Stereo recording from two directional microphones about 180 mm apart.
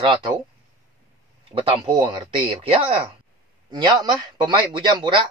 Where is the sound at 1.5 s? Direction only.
30° right (ahead or behind).